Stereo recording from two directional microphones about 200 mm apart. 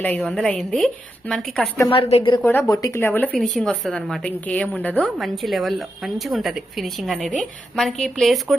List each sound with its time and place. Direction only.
0.0 s a woman's voice: 5° left (ahead or behind)
1.9 s a woman's voice: 30° left (ahead or behind)
2.4 s a woman's voice: 10° left (ahead or behind)